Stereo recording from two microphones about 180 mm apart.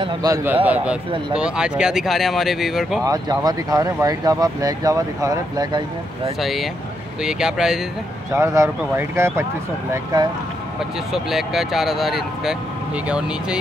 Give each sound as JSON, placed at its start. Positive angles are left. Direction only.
{"t": 0.0, "sound": "speech", "side_deg": -20}
{"t": 3.0, "sound": "speech", "side_deg": -20}
{"t": 6.4, "sound": "speech", "side_deg": 0}
{"t": 8.3, "sound": "speech", "side_deg": -15}
{"t": 11.1, "sound": "speech", "side_deg": 0}